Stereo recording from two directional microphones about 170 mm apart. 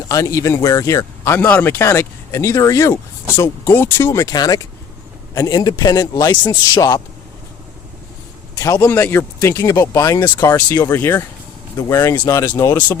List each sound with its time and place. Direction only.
0.1 s a man's voice: 20° left (ahead or behind)
8.5 s speech: 20° left (ahead or behind)